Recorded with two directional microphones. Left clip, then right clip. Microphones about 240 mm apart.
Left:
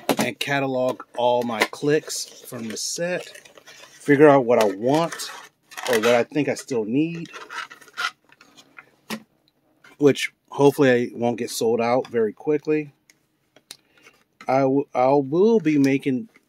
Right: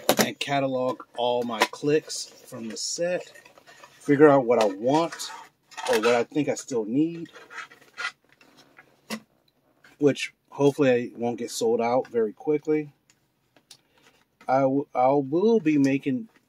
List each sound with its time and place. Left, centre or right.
0.3 s speech: left
8.7 s a sound: left
9.8 s speech: left
14.4 s speech: left